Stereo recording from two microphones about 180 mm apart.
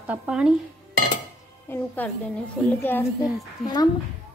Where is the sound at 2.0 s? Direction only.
10° left (ahead or behind).